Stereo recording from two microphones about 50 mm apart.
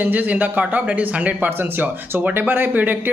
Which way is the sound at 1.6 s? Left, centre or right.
Right.